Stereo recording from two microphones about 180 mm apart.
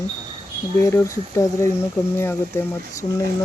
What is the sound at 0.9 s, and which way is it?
Speech, 15° left (ahead or behind).